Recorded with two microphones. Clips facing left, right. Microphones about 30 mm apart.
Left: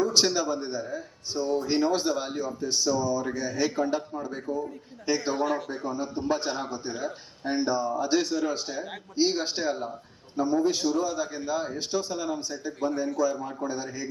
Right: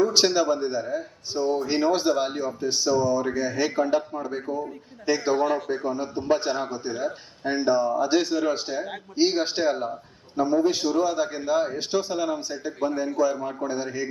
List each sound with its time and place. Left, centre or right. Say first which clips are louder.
0.0 s a man's voice: right 4 dB; centre